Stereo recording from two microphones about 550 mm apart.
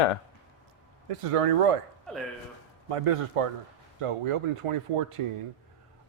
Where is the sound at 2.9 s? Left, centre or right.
Right.